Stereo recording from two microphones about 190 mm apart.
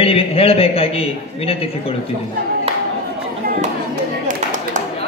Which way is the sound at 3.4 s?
50° right (ahead or behind).